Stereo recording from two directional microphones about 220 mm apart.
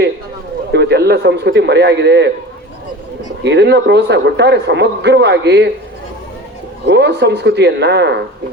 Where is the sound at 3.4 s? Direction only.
50° right (ahead or behind).